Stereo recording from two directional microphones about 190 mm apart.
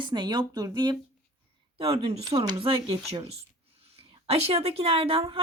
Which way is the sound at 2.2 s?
20° right (ahead or behind).